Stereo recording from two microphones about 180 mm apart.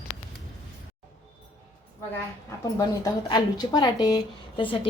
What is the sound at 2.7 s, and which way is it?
Speech, 20° left (ahead or behind).